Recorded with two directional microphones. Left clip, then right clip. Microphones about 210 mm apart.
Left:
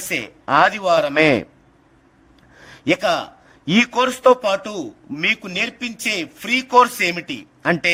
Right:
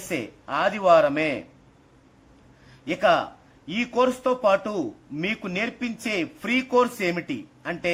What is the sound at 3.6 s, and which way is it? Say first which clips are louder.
Speech: left 6 dB; 50° left (ahead or behind).